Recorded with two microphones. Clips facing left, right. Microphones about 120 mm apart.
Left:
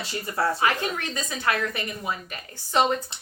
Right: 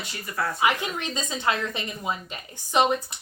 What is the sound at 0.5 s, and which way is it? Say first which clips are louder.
A woman's voice: even; 15° right (ahead or behind).